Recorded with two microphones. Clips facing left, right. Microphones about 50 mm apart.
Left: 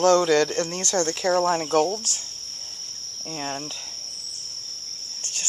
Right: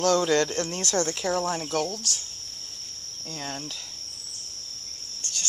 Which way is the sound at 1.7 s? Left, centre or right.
Left.